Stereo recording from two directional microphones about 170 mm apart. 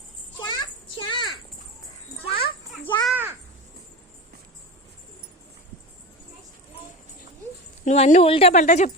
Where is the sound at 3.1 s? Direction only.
10° right (ahead or behind).